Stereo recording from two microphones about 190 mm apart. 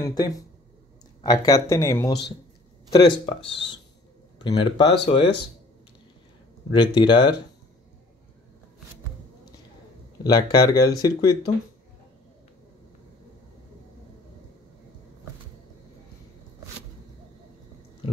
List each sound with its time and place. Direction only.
0.0 s speech: 20° left (ahead or behind)
6.7 s speech: 25° left (ahead or behind)
10.2 s speech: 20° left (ahead or behind)